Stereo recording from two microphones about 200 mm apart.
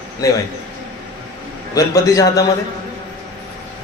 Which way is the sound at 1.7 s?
15° left (ahead or behind).